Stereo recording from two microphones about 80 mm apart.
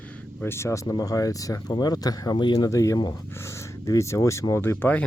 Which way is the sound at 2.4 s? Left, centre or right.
Left.